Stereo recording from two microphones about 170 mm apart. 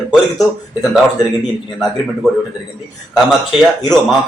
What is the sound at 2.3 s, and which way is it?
Speech, centre (ahead or behind).